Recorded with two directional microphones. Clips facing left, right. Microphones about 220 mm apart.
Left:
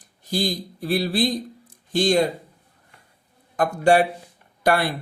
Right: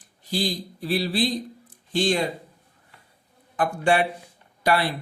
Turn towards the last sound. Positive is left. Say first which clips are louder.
# left 2 dB
turn(degrees=45)  # may be behind; listen again after turning